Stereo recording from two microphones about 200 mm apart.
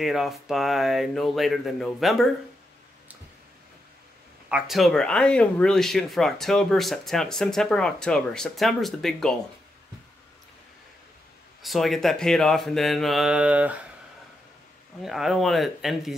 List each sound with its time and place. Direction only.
0.0 s speech: centre (ahead or behind)
4.5 s speech: 5° right (ahead or behind)
11.6 s speech: centre (ahead or behind)
15.0 s speech: centre (ahead or behind)